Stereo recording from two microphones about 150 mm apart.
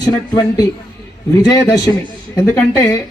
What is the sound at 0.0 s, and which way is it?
Speech, 25° left (ahead or behind).